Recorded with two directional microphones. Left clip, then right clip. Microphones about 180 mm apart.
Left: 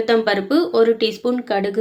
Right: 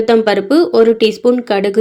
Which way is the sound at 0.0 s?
30° right (ahead or behind).